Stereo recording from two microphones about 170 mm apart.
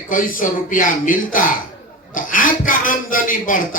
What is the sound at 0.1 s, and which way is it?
A man's voice, 55° left (ahead or behind).